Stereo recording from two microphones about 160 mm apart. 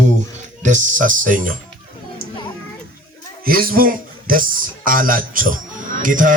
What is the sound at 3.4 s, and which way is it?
Speech, 65° right (ahead or behind).